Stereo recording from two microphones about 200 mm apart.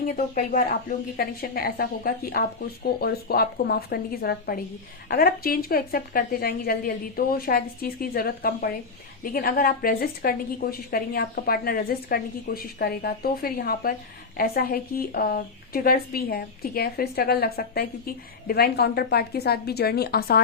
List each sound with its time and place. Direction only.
0.1 s speech: 45° left (ahead or behind)